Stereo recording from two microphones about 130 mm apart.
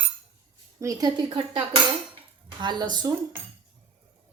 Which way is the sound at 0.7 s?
25° right (ahead or behind).